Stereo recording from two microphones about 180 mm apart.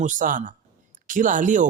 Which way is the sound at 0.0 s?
45° right (ahead or behind).